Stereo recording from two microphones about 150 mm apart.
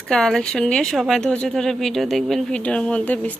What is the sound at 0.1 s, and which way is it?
A woman's voice, 5° left (ahead or behind).